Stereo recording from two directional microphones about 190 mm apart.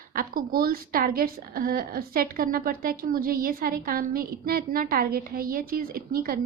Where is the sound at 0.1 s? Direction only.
50° right (ahead or behind).